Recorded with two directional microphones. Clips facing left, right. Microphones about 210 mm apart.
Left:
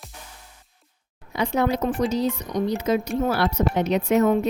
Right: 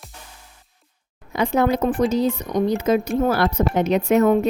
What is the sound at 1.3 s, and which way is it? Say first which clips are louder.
A woman's voice: right 3 dB; 50° right (ahead or behind).